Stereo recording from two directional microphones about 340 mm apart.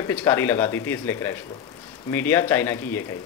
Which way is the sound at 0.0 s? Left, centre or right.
Centre.